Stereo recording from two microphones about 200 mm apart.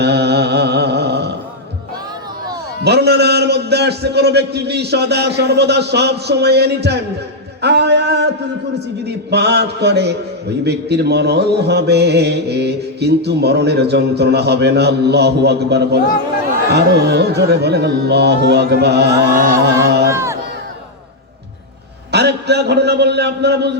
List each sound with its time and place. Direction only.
0.0 s a sound: 55° right (ahead or behind)
2.8 s mantra: 55° right (ahead or behind)
7.6 s a sound: 55° right (ahead or behind)
9.0 s mantra: 55° right (ahead or behind)
19.6 s music: 55° right (ahead or behind)
20.1 s crowd: 15° right (ahead or behind)
22.1 s a man's voice: 55° right (ahead or behind)